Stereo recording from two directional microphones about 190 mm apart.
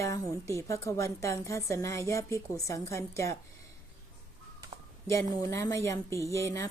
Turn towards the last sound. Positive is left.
turn(degrees=15)  # may be behind; listen again after turning